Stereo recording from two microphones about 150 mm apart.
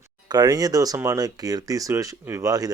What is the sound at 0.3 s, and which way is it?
Speech, 25° right (ahead or behind).